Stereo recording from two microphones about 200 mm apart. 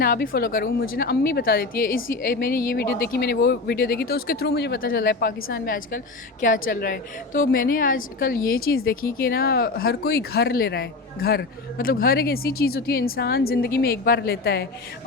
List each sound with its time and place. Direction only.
0.0 s speech: 50° left (ahead or behind)